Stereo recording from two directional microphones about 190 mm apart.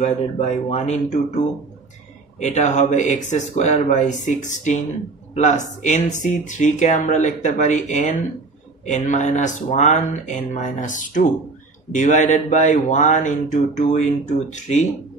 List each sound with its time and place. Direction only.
0.0 s speech: 35° left (ahead or behind)
2.4 s speech: 40° left (ahead or behind)